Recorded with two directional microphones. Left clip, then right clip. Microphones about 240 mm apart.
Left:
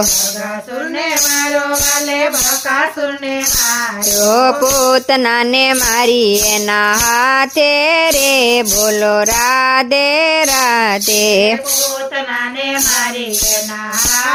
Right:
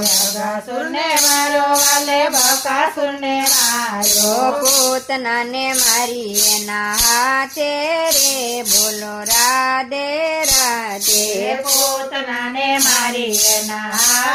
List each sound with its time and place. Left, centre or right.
4.4 s music: left